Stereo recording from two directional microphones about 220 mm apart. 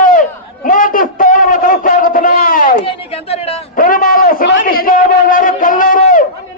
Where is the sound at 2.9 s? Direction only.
25° left (ahead or behind).